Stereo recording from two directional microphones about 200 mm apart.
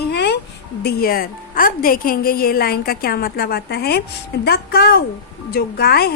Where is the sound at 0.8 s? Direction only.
45° left (ahead or behind).